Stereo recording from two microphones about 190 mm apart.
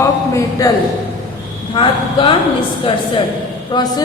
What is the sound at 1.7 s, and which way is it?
Speech, 25° left (ahead or behind).